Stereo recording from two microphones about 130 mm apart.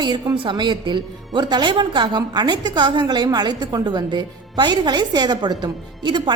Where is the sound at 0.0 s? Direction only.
35° right (ahead or behind).